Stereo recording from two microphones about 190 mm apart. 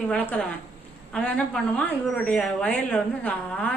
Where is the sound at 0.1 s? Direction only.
10° left (ahead or behind).